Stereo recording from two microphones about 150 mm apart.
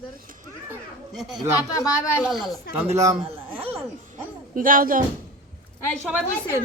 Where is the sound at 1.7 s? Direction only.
20° left (ahead or behind).